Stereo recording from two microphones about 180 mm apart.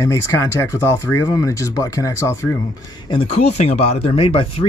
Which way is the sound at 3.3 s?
40° left (ahead or behind).